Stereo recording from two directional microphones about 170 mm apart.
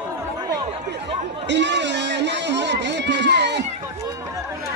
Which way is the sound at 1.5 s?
90° right.